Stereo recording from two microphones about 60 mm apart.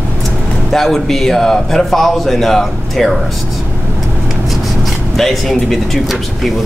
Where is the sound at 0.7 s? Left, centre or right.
Centre.